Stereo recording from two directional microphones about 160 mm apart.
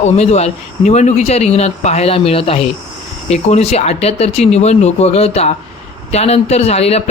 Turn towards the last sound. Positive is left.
turn(degrees=40)  # may be behind; listen again after turning